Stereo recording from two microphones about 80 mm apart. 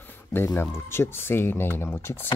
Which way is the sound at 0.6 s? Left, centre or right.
Left.